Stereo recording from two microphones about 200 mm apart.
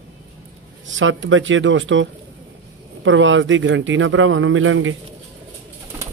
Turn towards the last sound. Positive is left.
turn(degrees=-75)  # may be behind; listen again after turning